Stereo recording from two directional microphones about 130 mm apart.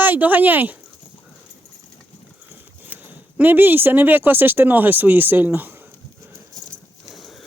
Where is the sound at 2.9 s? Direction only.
15° right (ahead or behind).